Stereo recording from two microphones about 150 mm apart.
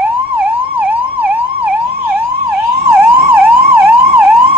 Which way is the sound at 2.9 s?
15° right (ahead or behind).